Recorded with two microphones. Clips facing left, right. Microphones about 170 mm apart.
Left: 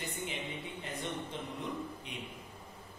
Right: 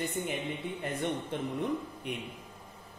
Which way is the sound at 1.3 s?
55° right (ahead or behind).